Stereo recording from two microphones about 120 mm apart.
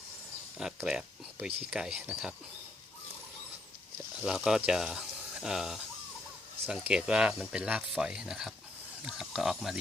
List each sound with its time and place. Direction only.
0.6 s speech: 5° right (ahead or behind)
4.2 s speech: 5° right (ahead or behind)